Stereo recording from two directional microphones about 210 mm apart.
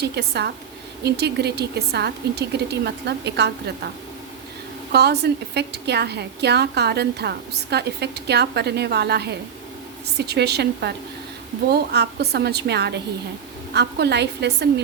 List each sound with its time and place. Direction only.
0.0 s a woman's voice: 50° right (ahead or behind)
4.9 s a woman's voice: 50° right (ahead or behind)